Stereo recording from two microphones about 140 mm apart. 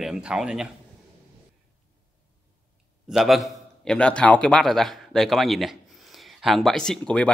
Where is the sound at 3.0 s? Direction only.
Centre (ahead or behind).